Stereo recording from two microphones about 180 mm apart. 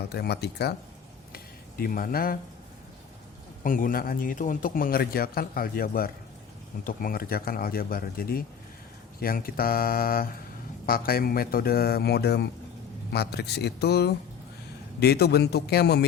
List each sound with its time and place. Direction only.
0.1 s speech: 65° left (ahead or behind)
1.8 s a man's voice: 55° left (ahead or behind)
3.6 s a man's voice: 50° left (ahead or behind); by 16.0 s 65° left (ahead or behind)